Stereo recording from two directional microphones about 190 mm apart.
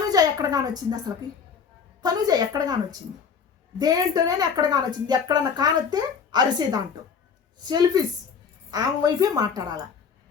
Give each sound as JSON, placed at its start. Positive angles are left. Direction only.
{"t": 0.0, "sound": "a woman's voice", "side_deg": -20}